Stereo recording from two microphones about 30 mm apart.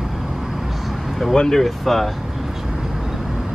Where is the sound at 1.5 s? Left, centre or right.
Centre.